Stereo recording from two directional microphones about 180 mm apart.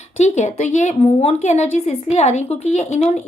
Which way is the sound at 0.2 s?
40° left (ahead or behind).